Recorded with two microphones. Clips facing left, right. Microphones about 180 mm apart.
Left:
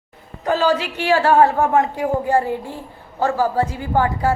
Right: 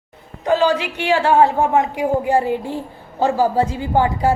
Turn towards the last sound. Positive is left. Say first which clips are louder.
# right 2 dB
turn(degrees=-20)  # may be behind; listen again after turning